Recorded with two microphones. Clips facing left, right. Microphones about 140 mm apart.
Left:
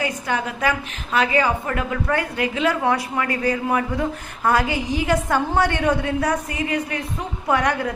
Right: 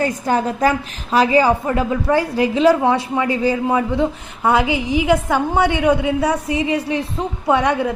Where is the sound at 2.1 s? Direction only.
30° right (ahead or behind); by 6.7 s 10° right (ahead or behind).